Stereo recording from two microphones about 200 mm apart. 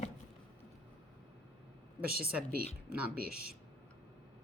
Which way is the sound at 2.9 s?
50° right (ahead or behind).